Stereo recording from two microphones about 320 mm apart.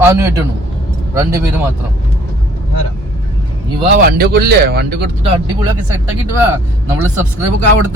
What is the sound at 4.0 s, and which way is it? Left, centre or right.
Speech, right.